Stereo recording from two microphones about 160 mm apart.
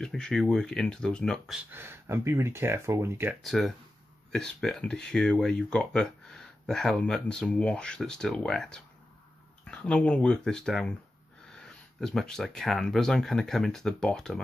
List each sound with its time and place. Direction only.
0.0 s speech: 5° left (ahead or behind)
1.7 s speech: 15° right (ahead or behind)
3.4 s speech: centre (ahead or behind)